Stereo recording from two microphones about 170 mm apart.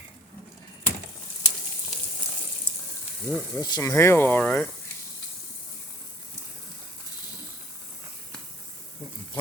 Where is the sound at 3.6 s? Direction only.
20° left (ahead or behind).